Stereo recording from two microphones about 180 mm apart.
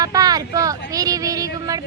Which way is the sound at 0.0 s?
20° right (ahead or behind).